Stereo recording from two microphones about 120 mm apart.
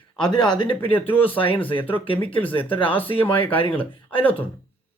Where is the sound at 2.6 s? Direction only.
45° left (ahead or behind).